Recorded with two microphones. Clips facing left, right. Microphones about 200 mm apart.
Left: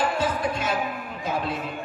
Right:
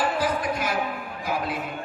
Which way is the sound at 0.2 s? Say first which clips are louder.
Even; 25° left (ahead or behind).